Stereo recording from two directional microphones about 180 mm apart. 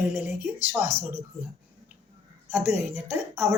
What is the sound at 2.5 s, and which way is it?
Speech, 5° right (ahead or behind).